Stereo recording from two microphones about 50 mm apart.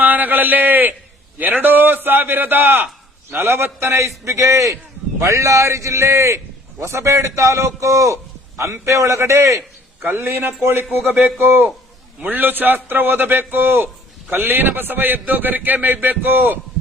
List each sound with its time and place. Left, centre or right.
0.0 s a man's voice: right
10.2 s a man's voice: right